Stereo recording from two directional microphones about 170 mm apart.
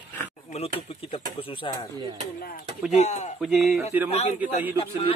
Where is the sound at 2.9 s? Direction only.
40° left (ahead or behind).